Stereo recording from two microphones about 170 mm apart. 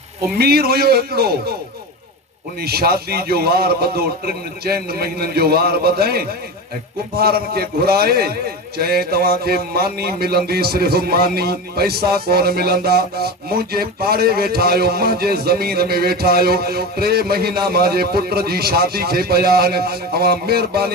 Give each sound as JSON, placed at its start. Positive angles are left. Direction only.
{"t": 0.3, "sound": "speech", "side_deg": -65}
{"t": 2.6, "sound": "a man's voice", "side_deg": -65}